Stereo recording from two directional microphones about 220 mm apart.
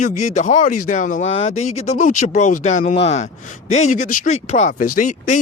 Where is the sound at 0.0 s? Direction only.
35° left (ahead or behind).